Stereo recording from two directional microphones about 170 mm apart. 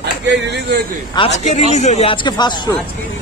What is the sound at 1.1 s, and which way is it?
A man's voice, 40° left (ahead or behind).